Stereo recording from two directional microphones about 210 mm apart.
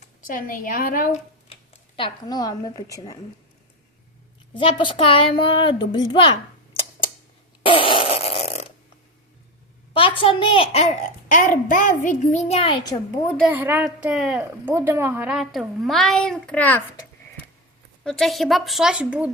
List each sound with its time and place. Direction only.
0.2 s speech: 40° left (ahead or behind)
2.0 s a woman's voice: 20° left (ahead or behind)
4.5 s a woman's voice: 25° left (ahead or behind)
7.6 s fart: 25° left (ahead or behind)
9.9 s a child's voice: 25° left (ahead or behind)
13.4 s a woman's voice: 10° right (ahead or behind)